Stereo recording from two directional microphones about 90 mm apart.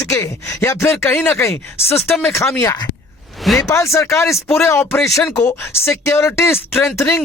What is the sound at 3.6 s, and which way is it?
Speech, 35° left (ahead or behind).